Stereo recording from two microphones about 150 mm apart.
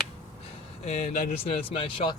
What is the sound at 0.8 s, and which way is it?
Speech, 45° left (ahead or behind).